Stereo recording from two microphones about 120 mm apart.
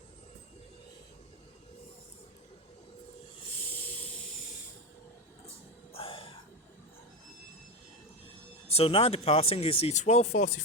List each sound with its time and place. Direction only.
5.9 s music: 50° left (ahead or behind)
8.7 s speech: 55° left (ahead or behind)